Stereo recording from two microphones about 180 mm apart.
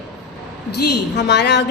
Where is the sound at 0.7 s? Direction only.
65° left (ahead or behind).